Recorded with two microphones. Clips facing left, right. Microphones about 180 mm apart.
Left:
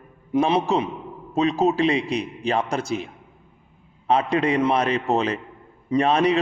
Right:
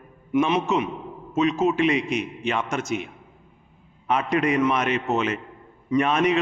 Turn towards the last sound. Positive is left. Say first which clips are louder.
# left 2 dB
turn(degrees=35)  # may be behind; listen again after turning